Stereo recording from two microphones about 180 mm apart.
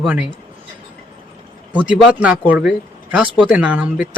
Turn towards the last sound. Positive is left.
turn(degrees=-5)  # may be behind; listen again after turning